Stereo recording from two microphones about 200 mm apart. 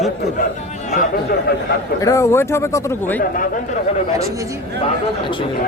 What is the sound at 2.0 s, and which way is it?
Speech, 15° left (ahead or behind).